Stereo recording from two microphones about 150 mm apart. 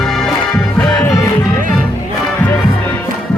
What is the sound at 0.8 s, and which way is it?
Music, 20° left (ahead or behind).